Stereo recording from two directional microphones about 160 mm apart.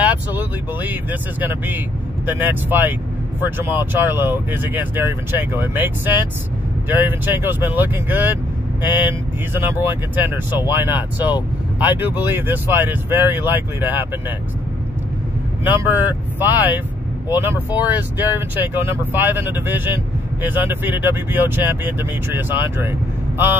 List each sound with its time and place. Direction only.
0.0 s speech: 10° right (ahead or behind)
15.6 s speech: 10° right (ahead or behind)